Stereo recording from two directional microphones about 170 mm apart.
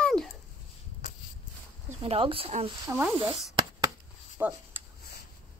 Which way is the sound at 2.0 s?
30° right (ahead or behind).